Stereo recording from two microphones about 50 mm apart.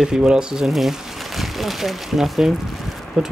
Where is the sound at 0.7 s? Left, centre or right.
Centre.